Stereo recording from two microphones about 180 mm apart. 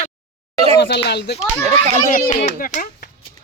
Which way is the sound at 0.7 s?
70° left (ahead or behind).